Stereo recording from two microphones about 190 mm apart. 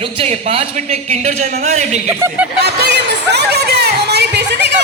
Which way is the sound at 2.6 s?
60° right (ahead or behind).